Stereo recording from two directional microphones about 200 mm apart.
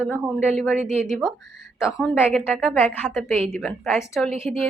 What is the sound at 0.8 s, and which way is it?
Speech, 35° right (ahead or behind).